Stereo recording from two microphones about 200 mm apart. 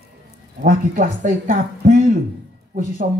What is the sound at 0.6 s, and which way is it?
Speech, 40° right (ahead or behind).